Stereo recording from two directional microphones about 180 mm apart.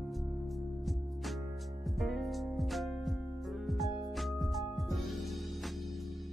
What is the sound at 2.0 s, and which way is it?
Music, centre (ahead or behind).